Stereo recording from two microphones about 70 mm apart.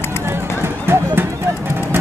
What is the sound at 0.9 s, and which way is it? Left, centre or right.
Clip-clop, right.